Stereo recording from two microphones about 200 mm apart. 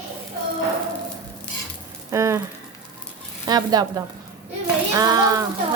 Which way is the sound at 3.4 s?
20° right (ahead or behind).